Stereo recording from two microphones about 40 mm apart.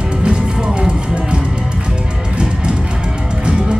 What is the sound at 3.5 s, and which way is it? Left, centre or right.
Music, right.